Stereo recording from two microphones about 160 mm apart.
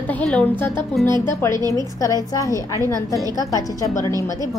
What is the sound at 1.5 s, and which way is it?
Speech, 25° right (ahead or behind).